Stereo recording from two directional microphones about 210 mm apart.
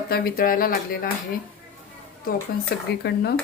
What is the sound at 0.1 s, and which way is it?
Speech, 45° left (ahead or behind).